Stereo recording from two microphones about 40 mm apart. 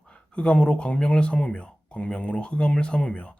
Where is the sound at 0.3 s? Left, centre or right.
Left.